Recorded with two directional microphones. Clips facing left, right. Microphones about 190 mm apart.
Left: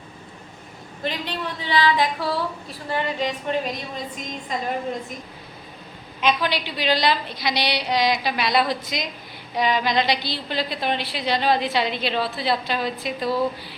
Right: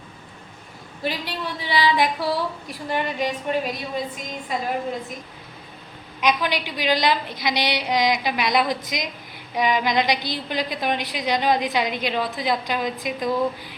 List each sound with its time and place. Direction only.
1.0 s a woman's voice: 10° right (ahead or behind)
6.1 s a woman's voice: 15° right (ahead or behind)